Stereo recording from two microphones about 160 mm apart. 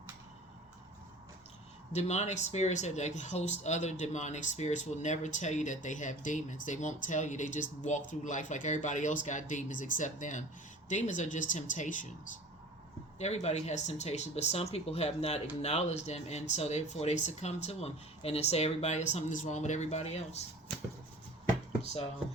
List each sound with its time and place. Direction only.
1.9 s speech: 45° left (ahead or behind)
13.1 s speech: 45° left (ahead or behind)